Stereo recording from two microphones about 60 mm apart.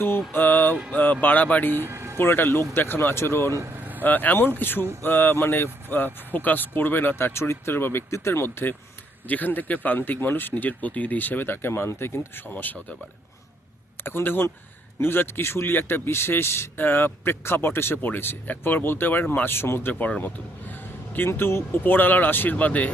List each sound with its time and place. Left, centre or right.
0.3 s mantra: left
0.9 s speech: left
1.8 s vehicle: right
2.1 s speech: left
3.7 s vehicle: right
4.0 s speech: left
9.2 s speech: left
12.5 s speech: left
14.0 s speech: left
19.9 s a man's voice: left